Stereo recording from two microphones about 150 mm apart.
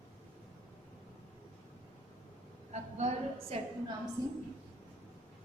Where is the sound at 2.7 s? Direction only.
50° right (ahead or behind).